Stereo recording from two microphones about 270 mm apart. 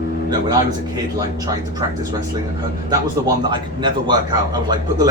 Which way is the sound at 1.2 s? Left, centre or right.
Centre.